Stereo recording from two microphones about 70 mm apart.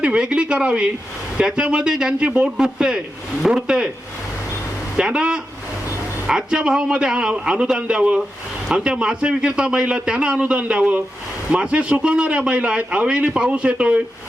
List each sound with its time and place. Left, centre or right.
0.0 s a man's voice: centre
4.9 s a man's voice: centre